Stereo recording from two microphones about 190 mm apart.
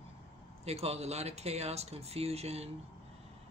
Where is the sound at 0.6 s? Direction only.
35° right (ahead or behind).